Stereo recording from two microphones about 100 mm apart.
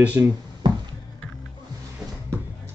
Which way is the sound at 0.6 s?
50° right (ahead or behind).